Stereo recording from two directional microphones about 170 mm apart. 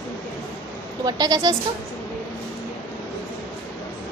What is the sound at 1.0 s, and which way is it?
Speech, 25° right (ahead or behind).